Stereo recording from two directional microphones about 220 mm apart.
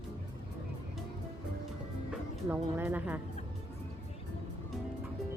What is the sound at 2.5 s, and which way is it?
Speech, 10° right (ahead or behind).